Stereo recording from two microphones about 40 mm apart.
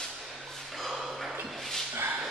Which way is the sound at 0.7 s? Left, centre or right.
Centre.